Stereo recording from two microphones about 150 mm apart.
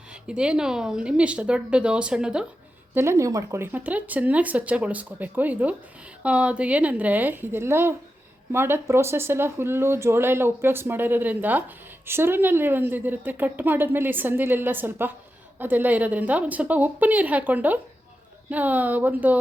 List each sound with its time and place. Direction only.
0.1 s speech: 5° right (ahead or behind)
2.9 s speech: 15° right (ahead or behind)